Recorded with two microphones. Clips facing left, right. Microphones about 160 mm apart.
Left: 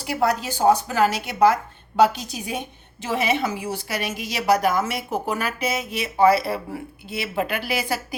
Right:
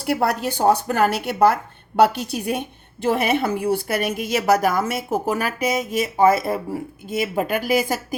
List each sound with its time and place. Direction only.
0.0 s a woman's voice: 60° right (ahead or behind)